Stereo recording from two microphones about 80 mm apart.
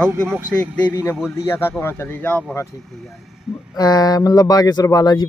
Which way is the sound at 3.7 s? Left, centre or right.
Left.